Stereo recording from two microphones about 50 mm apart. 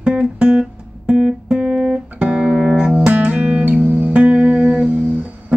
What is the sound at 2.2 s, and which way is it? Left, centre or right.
Music, right.